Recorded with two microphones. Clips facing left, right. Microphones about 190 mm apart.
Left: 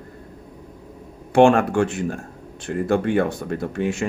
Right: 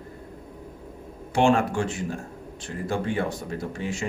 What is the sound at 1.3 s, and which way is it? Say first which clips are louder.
Speech: left 6 dB; 60° left (ahead or behind).